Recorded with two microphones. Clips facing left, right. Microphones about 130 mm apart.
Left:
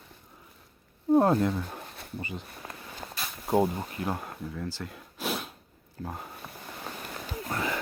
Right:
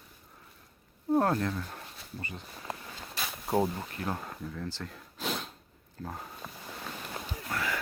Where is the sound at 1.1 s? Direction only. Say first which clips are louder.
Left 5 dB; 15° left (ahead or behind).